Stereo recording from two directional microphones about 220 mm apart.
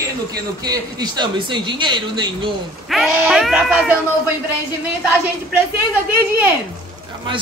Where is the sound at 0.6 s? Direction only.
20° right (ahead or behind).